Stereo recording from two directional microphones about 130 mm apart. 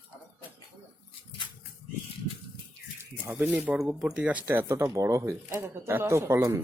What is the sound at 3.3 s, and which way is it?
Speech, 10° right (ahead or behind).